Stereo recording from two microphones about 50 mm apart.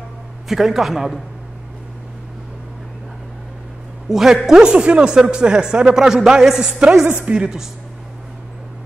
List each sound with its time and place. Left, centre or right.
0.5 s a man's voice: centre
4.1 s a man's voice: centre